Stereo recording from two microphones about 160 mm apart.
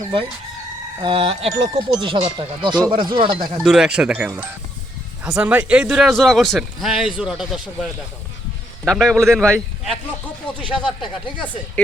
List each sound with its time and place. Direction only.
1.0 s speech: 35° right (ahead or behind)
3.6 s a man's voice: 5° right (ahead or behind)